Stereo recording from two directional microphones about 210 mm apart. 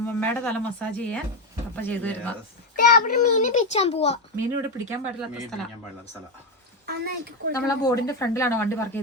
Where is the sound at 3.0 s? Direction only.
35° left (ahead or behind).